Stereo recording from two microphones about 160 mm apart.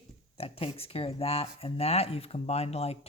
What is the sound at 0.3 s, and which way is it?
Speech, 35° left (ahead or behind).